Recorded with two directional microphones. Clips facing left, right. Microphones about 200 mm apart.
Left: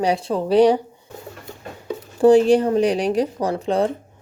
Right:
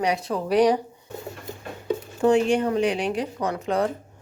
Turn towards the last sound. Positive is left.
turn(degrees=30)  # may be behind; listen again after turning